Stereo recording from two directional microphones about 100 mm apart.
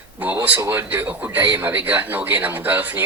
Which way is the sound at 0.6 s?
20° right (ahead or behind).